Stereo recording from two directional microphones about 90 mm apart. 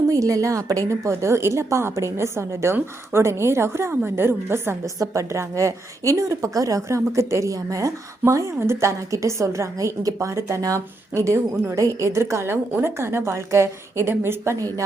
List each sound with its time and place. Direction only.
0.1 s a woman's voice: 40° right (ahead or behind)